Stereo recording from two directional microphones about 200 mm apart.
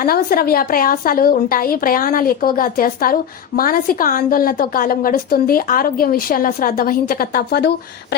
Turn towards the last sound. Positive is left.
turn(degrees=55)  # may be behind; listen again after turning